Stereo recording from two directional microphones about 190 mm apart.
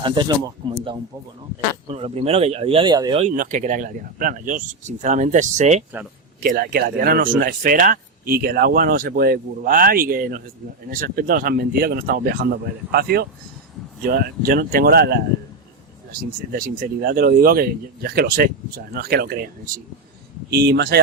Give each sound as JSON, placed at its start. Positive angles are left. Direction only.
{"t": 0.0, "sound": "speech", "side_deg": -25}
{"t": 3.2, "sound": "speech", "side_deg": -45}
{"t": 6.4, "sound": "speech", "side_deg": -55}